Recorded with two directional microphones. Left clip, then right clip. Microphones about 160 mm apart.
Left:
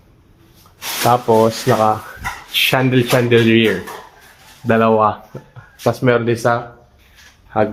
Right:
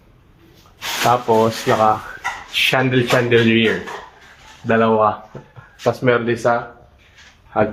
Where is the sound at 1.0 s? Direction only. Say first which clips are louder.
Left 2 dB; 20° left (ahead or behind).